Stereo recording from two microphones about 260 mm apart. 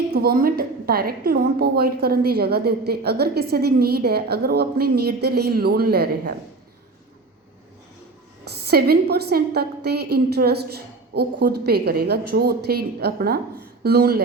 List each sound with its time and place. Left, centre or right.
0.1 s a woman's voice: right
8.4 s a woman's voice: right